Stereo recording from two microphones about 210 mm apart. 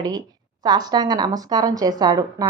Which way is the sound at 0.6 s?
20° right (ahead or behind).